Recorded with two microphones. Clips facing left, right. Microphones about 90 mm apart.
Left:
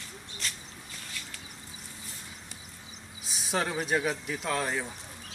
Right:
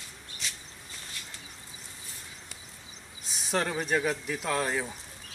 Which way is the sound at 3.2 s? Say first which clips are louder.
Right 1 dB; centre (ahead or behind).